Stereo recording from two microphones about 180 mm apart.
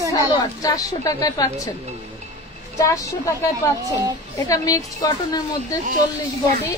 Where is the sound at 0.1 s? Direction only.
20° left (ahead or behind).